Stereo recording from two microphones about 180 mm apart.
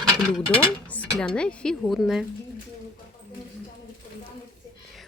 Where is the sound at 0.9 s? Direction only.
5° left (ahead or behind).